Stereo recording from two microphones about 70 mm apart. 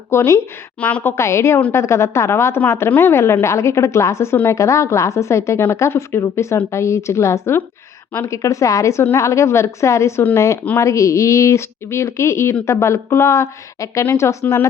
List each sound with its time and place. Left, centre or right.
0.1 s a woman's voice: left
0.8 s a woman's voice: left
1.1 s a woman's voice: left